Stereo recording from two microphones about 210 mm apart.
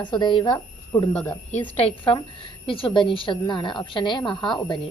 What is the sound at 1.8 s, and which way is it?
A woman's voice, 25° left (ahead or behind).